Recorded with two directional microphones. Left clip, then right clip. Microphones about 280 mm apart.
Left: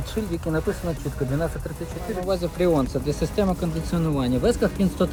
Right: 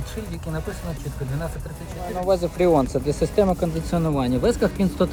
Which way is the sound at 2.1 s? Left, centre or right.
Centre.